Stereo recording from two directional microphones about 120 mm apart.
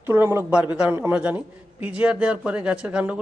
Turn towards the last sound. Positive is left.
turn(degrees=-10)  # may be behind; listen again after turning